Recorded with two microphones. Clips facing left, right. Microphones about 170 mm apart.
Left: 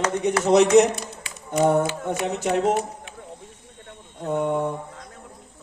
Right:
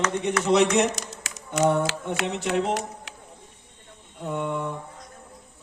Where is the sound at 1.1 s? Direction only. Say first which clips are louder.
Left 4 dB; 90° right.